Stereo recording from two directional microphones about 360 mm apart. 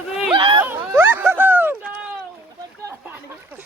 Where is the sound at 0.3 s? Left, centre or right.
Centre.